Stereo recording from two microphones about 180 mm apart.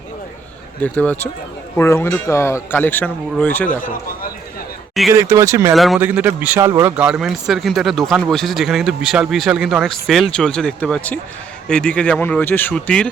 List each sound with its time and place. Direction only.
0.8 s speech: 5° left (ahead or behind)
5.1 s a man's voice: 15° right (ahead or behind)
5.7 s speech: centre (ahead or behind)
6.0 s a man's voice: 10° right (ahead or behind)
6.9 s speech: 5° right (ahead or behind)